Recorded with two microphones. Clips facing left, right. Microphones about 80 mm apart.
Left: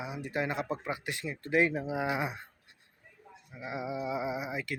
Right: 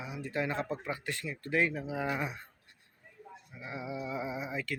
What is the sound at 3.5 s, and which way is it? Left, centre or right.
Speech, centre.